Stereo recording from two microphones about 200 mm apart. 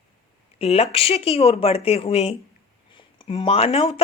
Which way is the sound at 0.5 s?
30° left (ahead or behind).